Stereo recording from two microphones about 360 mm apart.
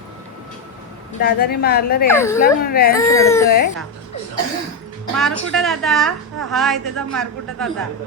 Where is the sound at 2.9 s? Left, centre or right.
Centre.